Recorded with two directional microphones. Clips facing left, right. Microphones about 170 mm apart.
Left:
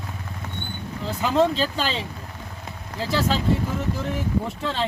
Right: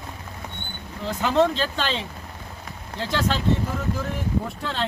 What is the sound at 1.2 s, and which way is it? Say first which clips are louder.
Speech: even; 5° left (ahead or behind).